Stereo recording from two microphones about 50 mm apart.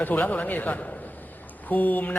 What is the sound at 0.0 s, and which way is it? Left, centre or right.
A man's voice, left.